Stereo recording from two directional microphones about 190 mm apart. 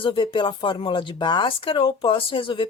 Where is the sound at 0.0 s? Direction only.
25° left (ahead or behind).